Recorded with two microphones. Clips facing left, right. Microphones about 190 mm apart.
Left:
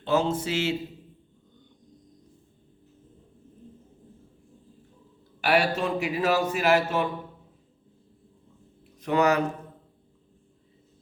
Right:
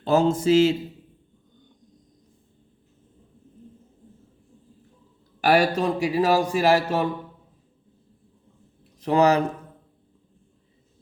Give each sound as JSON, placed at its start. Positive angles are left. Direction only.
{"t": 0.0, "sound": "a man's voice", "side_deg": -40}
{"t": 5.4, "sound": "a man's voice", "side_deg": -40}
{"t": 9.0, "sound": "a man's voice", "side_deg": -35}